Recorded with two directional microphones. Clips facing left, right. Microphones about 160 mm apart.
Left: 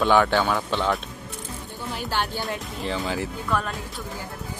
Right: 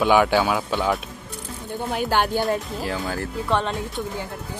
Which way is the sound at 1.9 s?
55° right (ahead or behind).